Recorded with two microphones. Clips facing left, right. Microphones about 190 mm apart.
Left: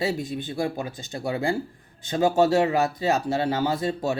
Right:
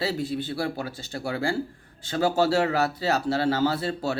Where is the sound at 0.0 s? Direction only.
15° left (ahead or behind).